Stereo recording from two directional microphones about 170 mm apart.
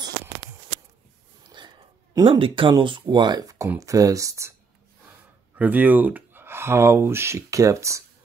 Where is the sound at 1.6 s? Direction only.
30° right (ahead or behind).